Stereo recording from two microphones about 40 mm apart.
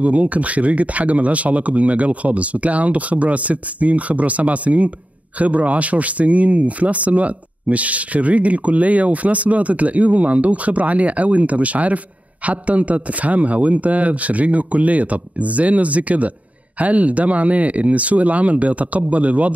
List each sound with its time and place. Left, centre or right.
0.0 s speech: right